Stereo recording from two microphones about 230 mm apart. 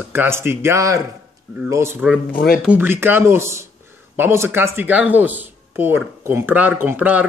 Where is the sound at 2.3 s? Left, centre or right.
Left.